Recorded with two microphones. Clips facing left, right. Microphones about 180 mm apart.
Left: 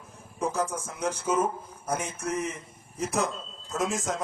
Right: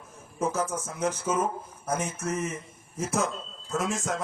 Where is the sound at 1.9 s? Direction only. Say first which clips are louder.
Right 1 dB; 10° right (ahead or behind).